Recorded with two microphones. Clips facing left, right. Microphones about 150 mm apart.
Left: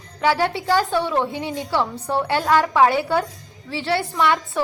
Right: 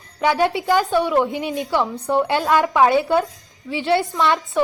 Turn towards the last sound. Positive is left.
turn(degrees=-20)  # may be behind; listen again after turning